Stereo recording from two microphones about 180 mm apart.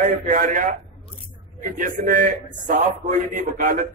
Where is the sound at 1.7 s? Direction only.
50° right (ahead or behind).